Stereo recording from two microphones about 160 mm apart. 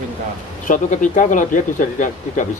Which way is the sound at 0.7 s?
55° left (ahead or behind).